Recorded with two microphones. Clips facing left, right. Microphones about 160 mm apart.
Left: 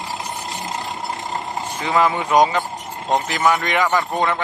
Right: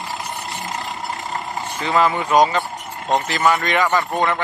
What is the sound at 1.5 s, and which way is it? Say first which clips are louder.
A man's voice: even; 15° left (ahead or behind).